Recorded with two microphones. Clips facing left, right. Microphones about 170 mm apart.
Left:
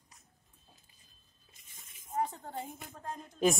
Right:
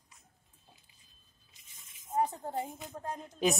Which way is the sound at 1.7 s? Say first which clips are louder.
Left 2 dB; 50° left (ahead or behind).